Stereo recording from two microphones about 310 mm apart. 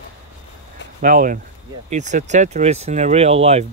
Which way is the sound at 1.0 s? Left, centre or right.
Right.